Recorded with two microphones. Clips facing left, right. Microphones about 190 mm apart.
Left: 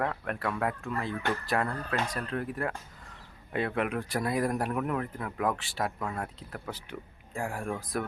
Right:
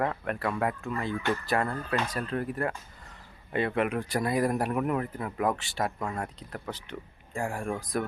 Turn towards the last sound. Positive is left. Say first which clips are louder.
# right 2 dB
turn(degrees=0)  # may be behind; listen again after turning